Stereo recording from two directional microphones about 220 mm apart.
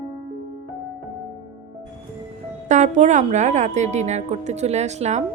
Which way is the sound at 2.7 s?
35° right (ahead or behind).